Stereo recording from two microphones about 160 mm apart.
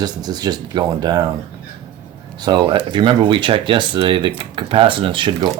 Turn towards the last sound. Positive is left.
turn(degrees=-30)  # may be behind; listen again after turning